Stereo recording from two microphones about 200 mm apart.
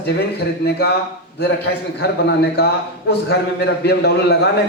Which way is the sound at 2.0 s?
55° left (ahead or behind).